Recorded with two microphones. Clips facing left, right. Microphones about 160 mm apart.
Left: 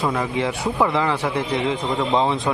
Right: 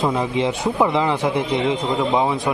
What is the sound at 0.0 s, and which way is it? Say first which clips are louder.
A man's voice: right 2 dB; 20° right (ahead or behind).